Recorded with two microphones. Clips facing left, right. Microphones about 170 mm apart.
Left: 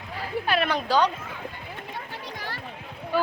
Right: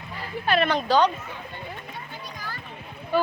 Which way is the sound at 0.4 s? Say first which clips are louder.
Right 4 dB; 5° left (ahead or behind).